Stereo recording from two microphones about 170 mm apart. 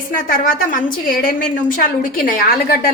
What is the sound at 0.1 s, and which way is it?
A woman's voice, 55° left (ahead or behind).